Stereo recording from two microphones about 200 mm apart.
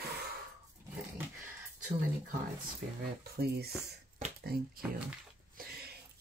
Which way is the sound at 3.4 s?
50° right (ahead or behind).